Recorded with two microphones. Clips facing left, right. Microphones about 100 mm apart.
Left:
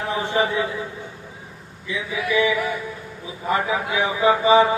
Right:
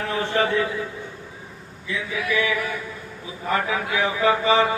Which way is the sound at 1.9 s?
20° left (ahead or behind).